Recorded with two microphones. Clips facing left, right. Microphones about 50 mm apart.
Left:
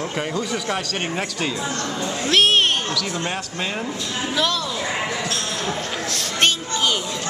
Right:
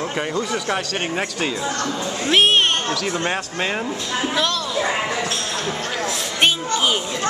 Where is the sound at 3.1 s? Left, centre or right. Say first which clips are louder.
Right 3 dB; right.